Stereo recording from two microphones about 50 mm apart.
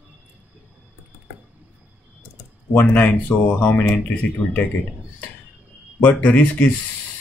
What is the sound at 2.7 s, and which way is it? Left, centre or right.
Speech, left.